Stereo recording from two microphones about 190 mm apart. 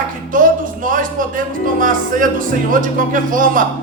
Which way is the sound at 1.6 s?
45° right (ahead or behind).